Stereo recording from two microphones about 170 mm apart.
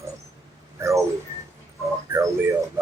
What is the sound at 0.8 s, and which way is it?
Speech, 15° right (ahead or behind).